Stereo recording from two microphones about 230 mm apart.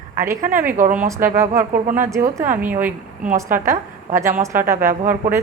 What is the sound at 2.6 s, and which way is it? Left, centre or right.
A woman's voice, centre.